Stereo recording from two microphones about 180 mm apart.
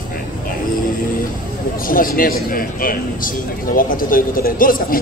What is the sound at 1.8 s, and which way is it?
A man's voice, 50° left (ahead or behind).